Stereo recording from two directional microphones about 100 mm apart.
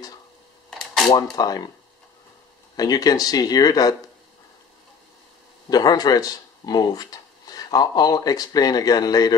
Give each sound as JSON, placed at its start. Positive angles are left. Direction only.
{"t": 1.3, "sound": "speech", "side_deg": 40}
{"t": 2.7, "sound": "speech", "side_deg": 40}
{"t": 5.7, "sound": "speech", "side_deg": 40}